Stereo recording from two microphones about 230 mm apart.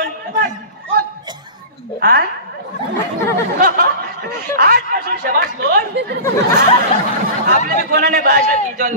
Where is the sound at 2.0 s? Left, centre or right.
Right.